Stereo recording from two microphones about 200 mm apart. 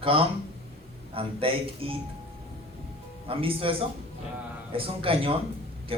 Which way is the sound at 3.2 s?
25° right (ahead or behind).